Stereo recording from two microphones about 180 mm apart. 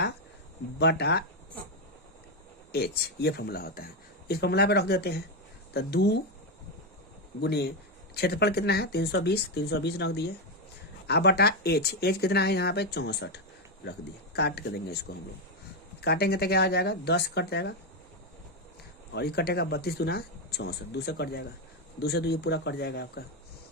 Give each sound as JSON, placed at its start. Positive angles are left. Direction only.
{"t": 0.8, "sound": "speech", "side_deg": 65}
{"t": 2.7, "sound": "speech", "side_deg": 65}
{"t": 7.4, "sound": "speech", "side_deg": 65}
{"t": 16.0, "sound": "speech", "side_deg": 60}
{"t": 19.1, "sound": "speech", "side_deg": 65}